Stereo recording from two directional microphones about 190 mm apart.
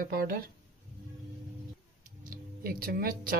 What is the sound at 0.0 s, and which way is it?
Speech, 50° right (ahead or behind).